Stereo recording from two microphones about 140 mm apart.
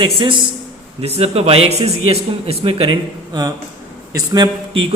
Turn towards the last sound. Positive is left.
turn(degrees=-30)  # may be behind; listen again after turning